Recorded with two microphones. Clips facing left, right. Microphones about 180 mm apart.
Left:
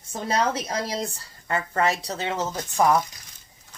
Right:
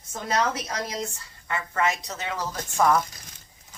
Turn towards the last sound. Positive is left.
turn(degrees=15)  # may be behind; listen again after turning